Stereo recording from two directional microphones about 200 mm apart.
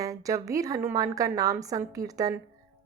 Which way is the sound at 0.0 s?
15° right (ahead or behind).